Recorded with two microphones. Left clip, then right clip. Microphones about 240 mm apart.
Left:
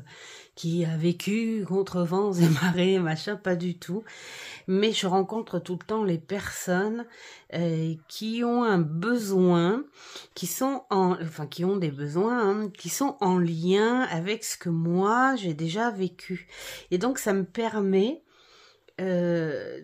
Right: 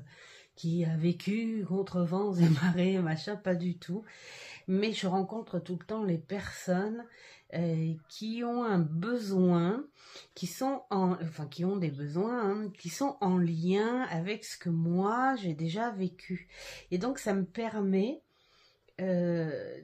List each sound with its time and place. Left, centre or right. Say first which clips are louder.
0.6 s speech: left 5 dB; left